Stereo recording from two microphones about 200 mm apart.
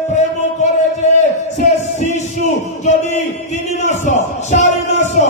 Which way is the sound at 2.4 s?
35° left (ahead or behind).